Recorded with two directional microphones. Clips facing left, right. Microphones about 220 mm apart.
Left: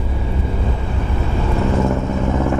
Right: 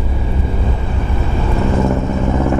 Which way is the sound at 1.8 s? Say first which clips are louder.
Right 2 dB; 25° right (ahead or behind).